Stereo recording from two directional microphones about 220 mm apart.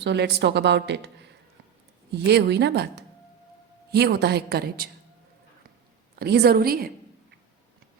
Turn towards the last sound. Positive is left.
turn(degrees=-45)  # may be behind; listen again after turning